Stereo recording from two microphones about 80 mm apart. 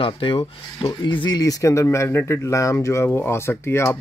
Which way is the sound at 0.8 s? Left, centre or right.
Left.